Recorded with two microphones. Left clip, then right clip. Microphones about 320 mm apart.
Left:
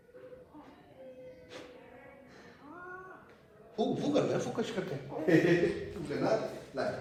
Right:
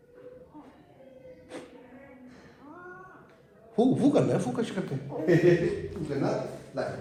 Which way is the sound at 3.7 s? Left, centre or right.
Centre.